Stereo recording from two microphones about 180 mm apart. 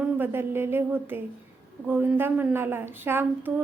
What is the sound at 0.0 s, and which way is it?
Speech, 10° right (ahead or behind).